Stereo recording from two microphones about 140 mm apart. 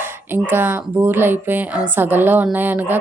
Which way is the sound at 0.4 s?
15° right (ahead or behind).